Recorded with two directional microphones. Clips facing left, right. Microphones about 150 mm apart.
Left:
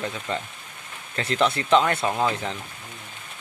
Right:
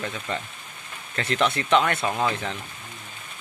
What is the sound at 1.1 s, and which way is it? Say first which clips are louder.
Speech: left 1 dB; 30° left (ahead or behind).